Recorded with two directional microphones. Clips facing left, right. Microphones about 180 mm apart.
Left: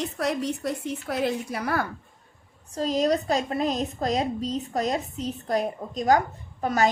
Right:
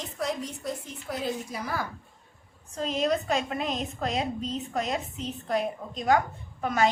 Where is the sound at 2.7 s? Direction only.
35° left (ahead or behind).